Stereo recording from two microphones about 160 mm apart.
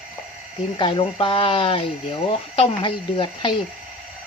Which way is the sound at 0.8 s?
30° left (ahead or behind).